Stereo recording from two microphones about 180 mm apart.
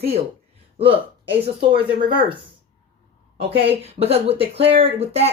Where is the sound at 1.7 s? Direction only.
30° right (ahead or behind).